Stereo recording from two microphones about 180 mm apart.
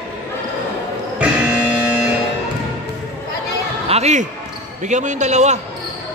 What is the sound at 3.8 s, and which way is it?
A man's voice, 35° right (ahead or behind).